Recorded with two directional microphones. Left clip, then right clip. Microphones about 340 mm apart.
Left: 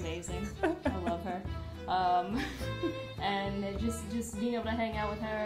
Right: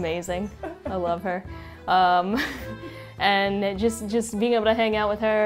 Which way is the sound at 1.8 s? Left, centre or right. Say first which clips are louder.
Right 10 dB; right.